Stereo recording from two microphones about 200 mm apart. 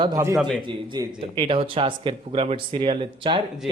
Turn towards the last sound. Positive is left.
turn(degrees=-25)  # may be behind; listen again after turning